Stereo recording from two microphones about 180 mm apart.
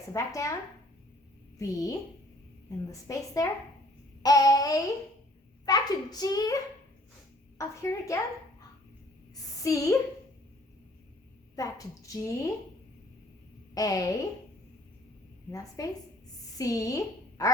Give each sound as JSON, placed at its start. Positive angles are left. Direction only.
{"t": 0.1, "sound": "a woman's voice", "side_deg": 20}
{"t": 1.5, "sound": "a woman's voice", "side_deg": 20}
{"t": 7.6, "sound": "a woman's voice", "side_deg": 15}
{"t": 9.3, "sound": "a sound", "side_deg": 20}
{"t": 11.5, "sound": "a woman's voice", "side_deg": 20}
{"t": 13.7, "sound": "a woman's voice", "side_deg": 20}
{"t": 15.5, "sound": "a woman's voice", "side_deg": 20}